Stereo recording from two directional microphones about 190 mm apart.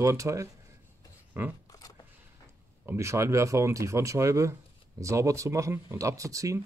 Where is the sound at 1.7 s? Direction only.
20° left (ahead or behind).